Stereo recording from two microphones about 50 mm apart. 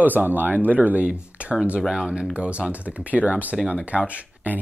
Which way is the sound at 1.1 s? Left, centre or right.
Right.